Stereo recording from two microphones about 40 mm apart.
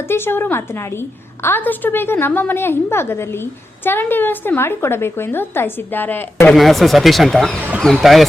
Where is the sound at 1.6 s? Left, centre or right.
Left.